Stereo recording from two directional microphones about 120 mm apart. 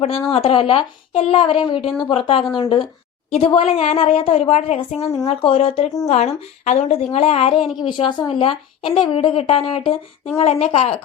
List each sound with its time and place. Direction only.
0.3 s a woman's voice: 50° left (ahead or behind)
6.1 s a woman's voice: 65° left (ahead or behind)